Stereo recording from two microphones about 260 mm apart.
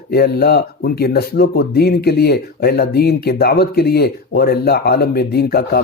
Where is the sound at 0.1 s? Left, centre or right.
Left.